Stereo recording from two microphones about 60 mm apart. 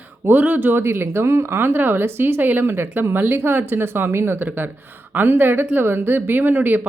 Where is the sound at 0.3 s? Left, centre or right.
Right.